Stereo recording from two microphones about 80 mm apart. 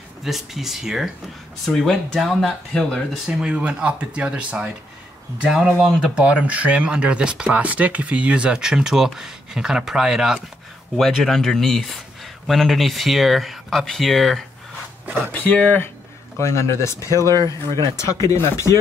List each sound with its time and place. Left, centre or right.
0.2 s speech: centre
3.3 s speech: centre
15.3 s speech: left
16.3 s speech: left